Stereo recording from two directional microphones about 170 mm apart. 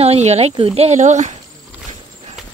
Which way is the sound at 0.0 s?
40° right (ahead or behind).